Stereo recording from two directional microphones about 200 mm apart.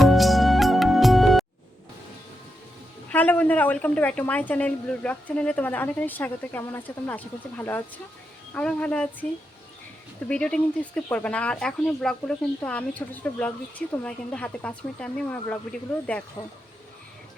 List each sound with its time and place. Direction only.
0.0 s music: centre (ahead or behind)
3.1 s a woman's voice: 10° left (ahead or behind)
10.2 s speech: 5° left (ahead or behind)